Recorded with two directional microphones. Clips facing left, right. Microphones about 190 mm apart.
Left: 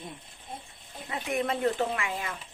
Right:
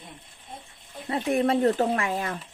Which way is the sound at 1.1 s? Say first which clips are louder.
Right 7 dB; 35° right (ahead or behind).